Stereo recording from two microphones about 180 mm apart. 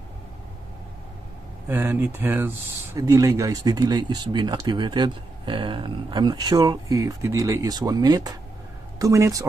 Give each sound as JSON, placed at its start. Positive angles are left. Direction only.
{"t": 1.7, "sound": "speech", "side_deg": -10}